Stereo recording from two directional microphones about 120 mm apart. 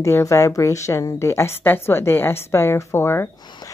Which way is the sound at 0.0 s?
25° left (ahead or behind).